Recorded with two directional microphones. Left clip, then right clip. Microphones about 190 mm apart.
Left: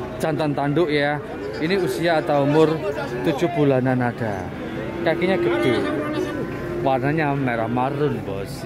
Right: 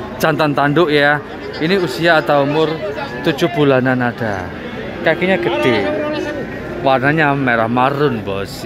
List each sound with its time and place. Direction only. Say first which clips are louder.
0.2 s speech: right 9 dB; centre (ahead or behind)
5.5 s speech: right 5 dB; 55° left (ahead or behind)
6.8 s speech: right 8 dB; centre (ahead or behind)